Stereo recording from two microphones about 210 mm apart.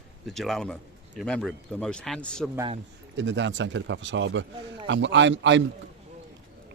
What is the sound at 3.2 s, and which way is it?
A man's voice, 60° right (ahead or behind).